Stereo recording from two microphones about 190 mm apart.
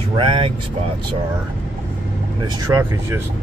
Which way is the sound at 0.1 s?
25° right (ahead or behind).